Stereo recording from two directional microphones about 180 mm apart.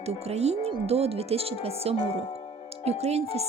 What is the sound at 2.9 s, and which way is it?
Speech, 35° right (ahead or behind).